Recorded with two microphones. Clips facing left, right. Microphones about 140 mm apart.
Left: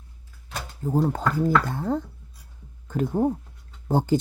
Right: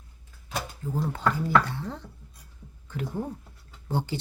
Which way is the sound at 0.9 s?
40° left (ahead or behind).